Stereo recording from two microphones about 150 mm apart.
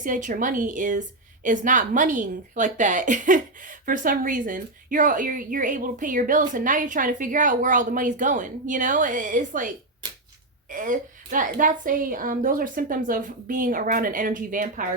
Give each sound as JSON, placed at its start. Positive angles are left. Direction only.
{"t": 0.0, "sound": "a woman's voice", "side_deg": -60}